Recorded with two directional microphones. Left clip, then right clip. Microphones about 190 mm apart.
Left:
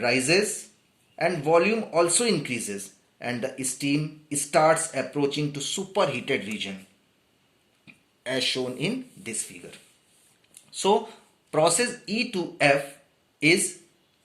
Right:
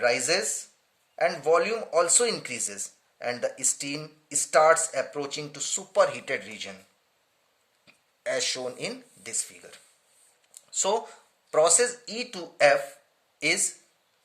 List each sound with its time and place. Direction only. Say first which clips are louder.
0.0 s speech: left 2 dB; 55° right (ahead or behind)
7.9 s speech: right 1 dB; 55° right (ahead or behind)
10.5 s a sound: left 4 dB; 60° right (ahead or behind)
11.5 s speech: even; 55° right (ahead or behind)